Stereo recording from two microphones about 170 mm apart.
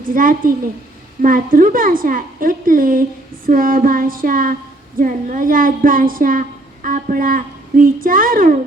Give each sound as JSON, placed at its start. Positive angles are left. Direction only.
{"t": 0.0, "sound": "a woman's voice", "side_deg": -55}